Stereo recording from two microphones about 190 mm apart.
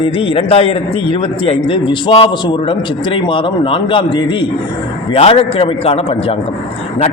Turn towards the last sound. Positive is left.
turn(degrees=30)  # may be behind; listen again after turning